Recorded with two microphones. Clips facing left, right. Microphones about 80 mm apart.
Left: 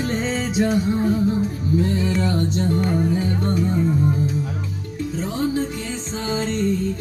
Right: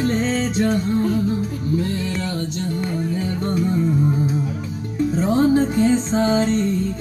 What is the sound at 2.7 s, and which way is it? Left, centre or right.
Music, left.